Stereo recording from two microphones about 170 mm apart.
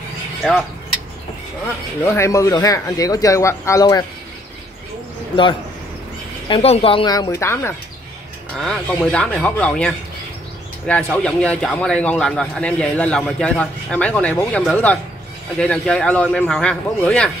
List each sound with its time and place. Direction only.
2.0 s speech: 15° left (ahead or behind)
5.3 s speech: 30° left (ahead or behind)
8.5 s speech: centre (ahead or behind)